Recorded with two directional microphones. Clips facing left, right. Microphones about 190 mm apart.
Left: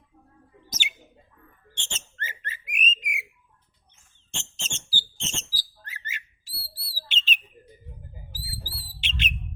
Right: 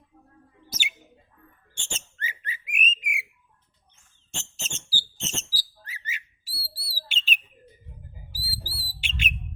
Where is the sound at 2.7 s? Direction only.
10° right (ahead or behind).